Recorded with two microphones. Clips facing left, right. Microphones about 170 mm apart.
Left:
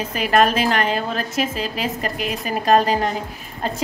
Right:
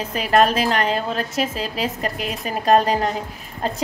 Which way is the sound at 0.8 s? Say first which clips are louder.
Even; 5° left (ahead or behind).